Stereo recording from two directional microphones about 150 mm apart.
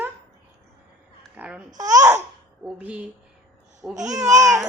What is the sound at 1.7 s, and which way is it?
Babbling, 25° right (ahead or behind).